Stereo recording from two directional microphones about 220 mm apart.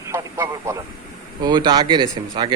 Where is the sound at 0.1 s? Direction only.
15° right (ahead or behind).